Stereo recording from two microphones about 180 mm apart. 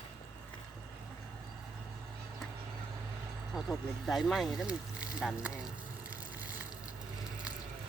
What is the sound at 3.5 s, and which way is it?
Speech, centre (ahead or behind).